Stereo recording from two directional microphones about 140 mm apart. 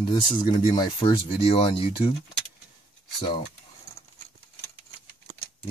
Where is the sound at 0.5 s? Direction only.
35° left (ahead or behind).